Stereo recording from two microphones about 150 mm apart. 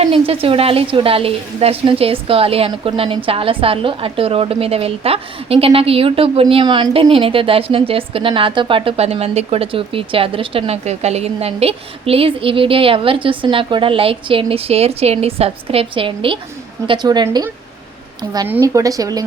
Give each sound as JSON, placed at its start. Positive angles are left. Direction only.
{"t": 0.0, "sound": "a woman's voice", "side_deg": -40}
{"t": 18.4, "sound": "speech", "side_deg": -15}